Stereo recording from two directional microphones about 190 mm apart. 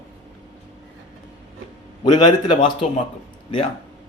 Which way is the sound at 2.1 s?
25° left (ahead or behind).